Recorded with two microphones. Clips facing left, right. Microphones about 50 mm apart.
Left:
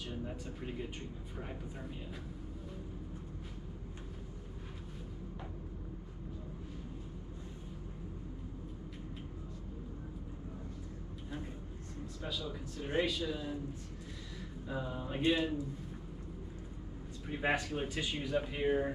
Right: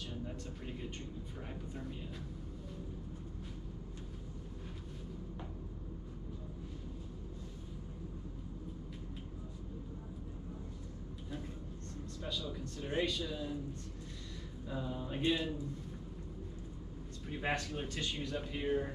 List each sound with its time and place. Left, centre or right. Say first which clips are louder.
0.0 s a sound: left 2 dB; centre
1.4 s speech: left 1 dB; centre
12.3 s speech: even; centre
14.7 s speech: left 1 dB; centre
17.3 s speech: left 3 dB; centre